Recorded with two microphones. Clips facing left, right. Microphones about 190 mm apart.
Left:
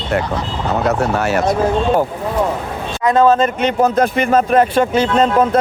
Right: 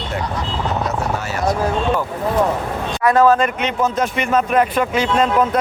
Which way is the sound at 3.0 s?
20° left (ahead or behind).